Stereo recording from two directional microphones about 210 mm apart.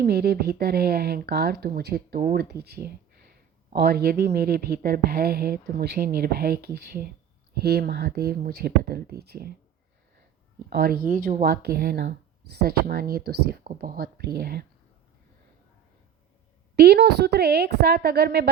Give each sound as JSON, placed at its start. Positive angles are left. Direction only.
{"t": 0.0, "sound": "speech", "side_deg": -50}
{"t": 10.7, "sound": "speech", "side_deg": -45}
{"t": 16.7, "sound": "speech", "side_deg": -50}